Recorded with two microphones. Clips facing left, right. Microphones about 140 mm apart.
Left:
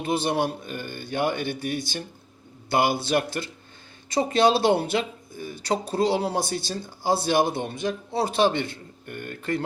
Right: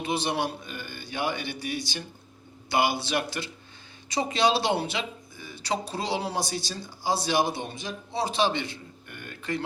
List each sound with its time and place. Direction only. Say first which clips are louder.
0.0 s speech: left 4 dB; 50° left (ahead or behind)